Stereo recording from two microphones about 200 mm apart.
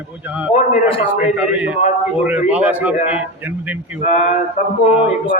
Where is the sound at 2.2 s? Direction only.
10° right (ahead or behind).